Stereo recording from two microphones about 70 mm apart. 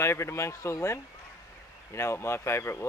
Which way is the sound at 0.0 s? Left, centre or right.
Left.